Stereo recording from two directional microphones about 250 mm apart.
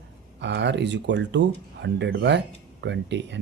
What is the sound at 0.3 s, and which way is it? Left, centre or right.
Speech, right.